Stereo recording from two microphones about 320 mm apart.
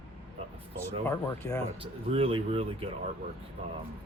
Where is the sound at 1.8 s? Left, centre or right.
Centre.